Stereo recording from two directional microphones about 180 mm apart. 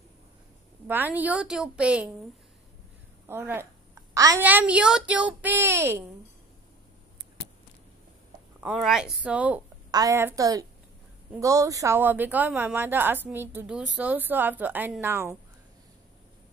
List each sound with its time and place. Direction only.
0.8 s a woman's voice: 10° right (ahead or behind)
3.3 s a woman's voice: 10° right (ahead or behind)
8.8 s speech: centre (ahead or behind)
9.8 s a woman's voice: 20° right (ahead or behind)